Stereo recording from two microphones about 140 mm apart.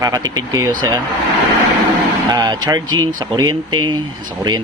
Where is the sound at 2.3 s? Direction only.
30° right (ahead or behind).